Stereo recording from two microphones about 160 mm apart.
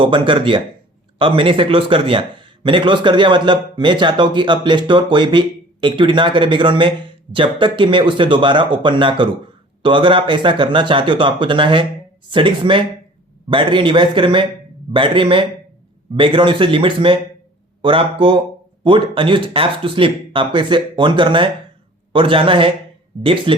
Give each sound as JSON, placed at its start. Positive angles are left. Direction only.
{"t": 0.0, "sound": "a man's voice", "side_deg": -30}